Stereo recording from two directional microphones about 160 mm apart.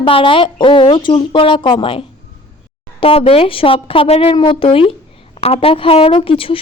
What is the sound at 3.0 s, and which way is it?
A woman's voice, 35° left (ahead or behind).